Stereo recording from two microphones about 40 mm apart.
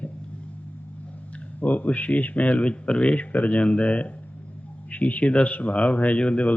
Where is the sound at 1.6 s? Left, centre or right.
Left.